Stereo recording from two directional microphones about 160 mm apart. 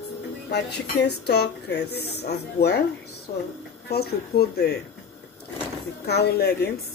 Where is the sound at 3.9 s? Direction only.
80° left.